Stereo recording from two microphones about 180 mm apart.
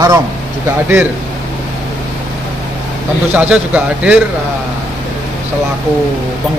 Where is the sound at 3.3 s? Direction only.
5° right (ahead or behind).